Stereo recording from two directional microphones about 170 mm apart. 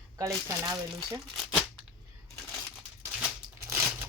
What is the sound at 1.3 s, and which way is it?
Speech, centre (ahead or behind).